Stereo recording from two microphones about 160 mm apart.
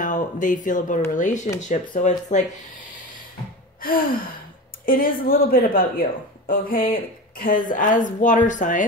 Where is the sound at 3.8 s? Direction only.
65° left (ahead or behind).